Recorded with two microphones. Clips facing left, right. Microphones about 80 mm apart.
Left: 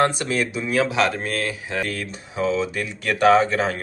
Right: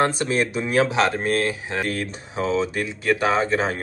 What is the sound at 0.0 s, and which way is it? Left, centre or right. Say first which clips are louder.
Speech: even; right.